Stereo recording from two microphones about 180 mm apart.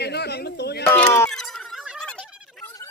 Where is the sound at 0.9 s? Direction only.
15° left (ahead or behind).